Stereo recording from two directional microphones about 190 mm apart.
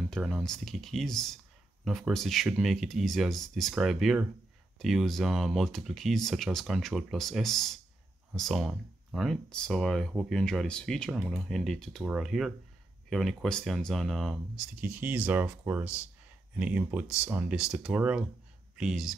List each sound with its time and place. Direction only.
0.1 s speech: centre (ahead or behind)